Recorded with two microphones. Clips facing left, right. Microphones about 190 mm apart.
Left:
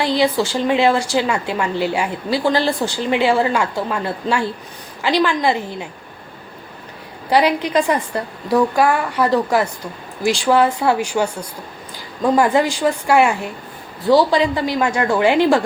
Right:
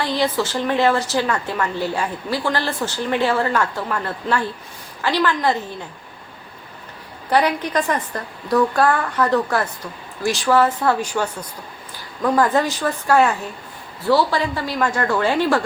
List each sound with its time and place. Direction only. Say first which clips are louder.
0.0 s a woman's voice: left 4 dB; 10° left (ahead or behind)
7.3 s a woman's voice: left 3 dB; 10° left (ahead or behind)
12.2 s a woman's voice: left 3 dB; 20° left (ahead or behind)